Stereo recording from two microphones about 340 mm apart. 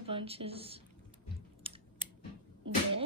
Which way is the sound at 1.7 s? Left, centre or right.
Centre.